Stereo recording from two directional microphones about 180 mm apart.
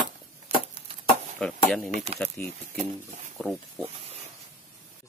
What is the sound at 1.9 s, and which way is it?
Speech, 35° right (ahead or behind).